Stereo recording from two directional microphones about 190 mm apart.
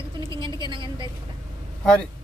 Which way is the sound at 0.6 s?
25° right (ahead or behind).